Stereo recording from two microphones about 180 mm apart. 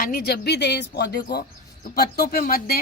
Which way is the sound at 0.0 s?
55° left (ahead or behind).